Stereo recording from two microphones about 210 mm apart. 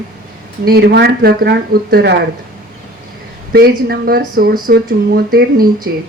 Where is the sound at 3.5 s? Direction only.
50° right (ahead or behind).